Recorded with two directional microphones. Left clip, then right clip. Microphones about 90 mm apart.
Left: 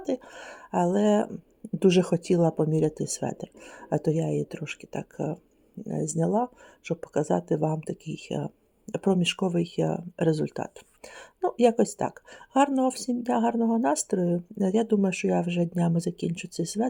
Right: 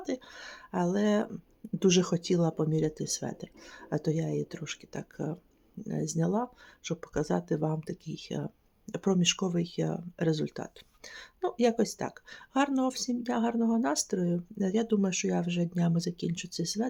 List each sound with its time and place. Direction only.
0.0 s speech: 30° left (ahead or behind)